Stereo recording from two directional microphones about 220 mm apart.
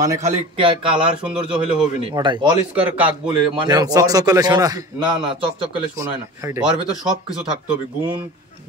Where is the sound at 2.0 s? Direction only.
20° right (ahead or behind).